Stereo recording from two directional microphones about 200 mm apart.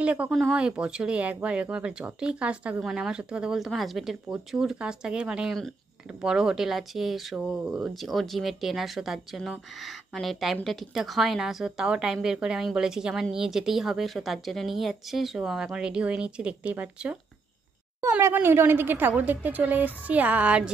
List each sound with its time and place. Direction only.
0.0 s a woman's voice: 5° right (ahead or behind)